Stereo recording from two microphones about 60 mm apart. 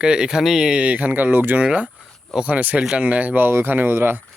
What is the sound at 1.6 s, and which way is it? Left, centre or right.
Speech, centre.